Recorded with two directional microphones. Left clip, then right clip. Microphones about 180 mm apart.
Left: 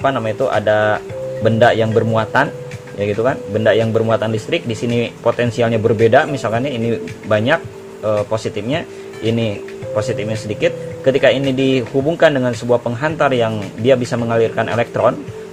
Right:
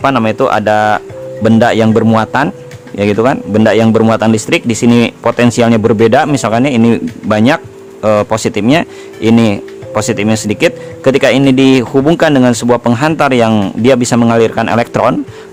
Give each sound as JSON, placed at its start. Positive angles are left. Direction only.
{"t": 0.0, "sound": "speech", "side_deg": -50}